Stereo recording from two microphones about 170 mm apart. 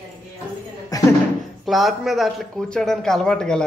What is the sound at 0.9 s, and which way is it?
Speech, 20° left (ahead or behind).